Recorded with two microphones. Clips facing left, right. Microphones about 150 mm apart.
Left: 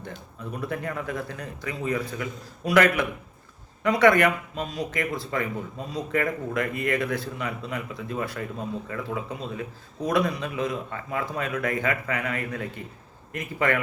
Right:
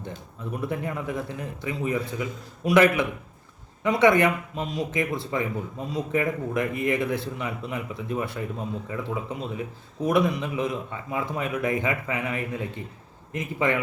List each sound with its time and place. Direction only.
0.5 s speech: 20° right (ahead or behind)
3.8 s speech: 20° right (ahead or behind)